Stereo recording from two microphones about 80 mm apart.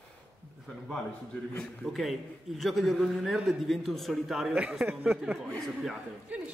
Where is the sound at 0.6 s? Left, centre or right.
Centre.